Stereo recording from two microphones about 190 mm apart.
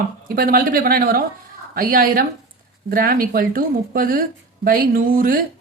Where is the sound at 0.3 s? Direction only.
50° right (ahead or behind).